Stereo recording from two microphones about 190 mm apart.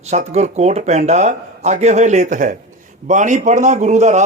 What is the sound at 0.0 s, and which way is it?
Speech, 35° right (ahead or behind).